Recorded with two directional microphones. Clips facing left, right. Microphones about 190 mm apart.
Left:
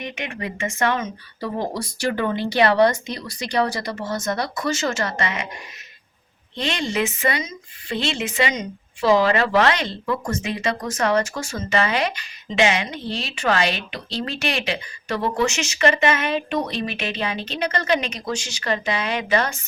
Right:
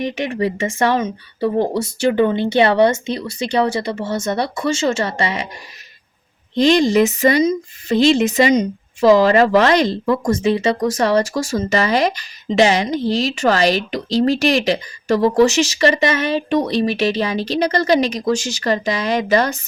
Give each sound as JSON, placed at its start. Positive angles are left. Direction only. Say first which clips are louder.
{"t": 0.3, "sound": "speech", "louder": "right 8 dB", "side_deg": -35}
{"t": 6.6, "sound": "speech", "louder": "right 11 dB", "side_deg": -40}